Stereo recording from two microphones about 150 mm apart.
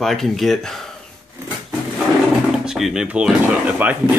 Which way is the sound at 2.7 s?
5° right (ahead or behind).